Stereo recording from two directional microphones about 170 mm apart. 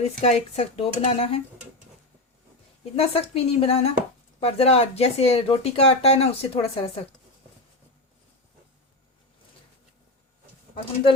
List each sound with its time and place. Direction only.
0.2 s speech: 40° left (ahead or behind)
2.9 s speech: 35° left (ahead or behind)